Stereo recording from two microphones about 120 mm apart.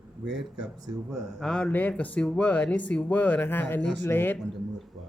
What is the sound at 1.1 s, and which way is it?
Speech, centre (ahead or behind).